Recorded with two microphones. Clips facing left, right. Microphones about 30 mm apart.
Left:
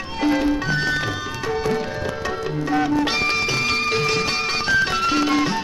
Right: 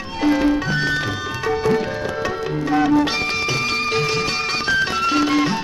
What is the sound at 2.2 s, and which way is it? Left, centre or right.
Tabla, centre.